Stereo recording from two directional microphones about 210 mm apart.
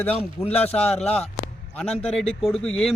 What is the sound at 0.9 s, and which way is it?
Speech, 30° left (ahead or behind).